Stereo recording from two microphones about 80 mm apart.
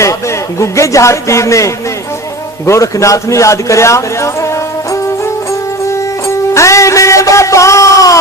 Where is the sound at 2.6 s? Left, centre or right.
Left.